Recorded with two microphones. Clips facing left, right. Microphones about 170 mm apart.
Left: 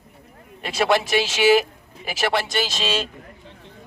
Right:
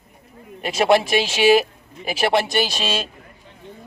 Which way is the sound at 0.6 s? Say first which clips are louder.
Right 4 dB; 15° right (ahead or behind).